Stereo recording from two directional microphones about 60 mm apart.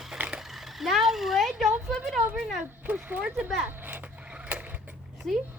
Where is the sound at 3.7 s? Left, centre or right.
Right.